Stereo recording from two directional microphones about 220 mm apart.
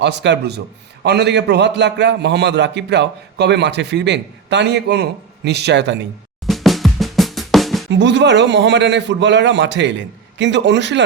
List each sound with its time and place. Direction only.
0.0 s a man's voice: 50° right (ahead or behind)
6.4 s drum: centre (ahead or behind)
7.9 s a man's voice: 55° right (ahead or behind)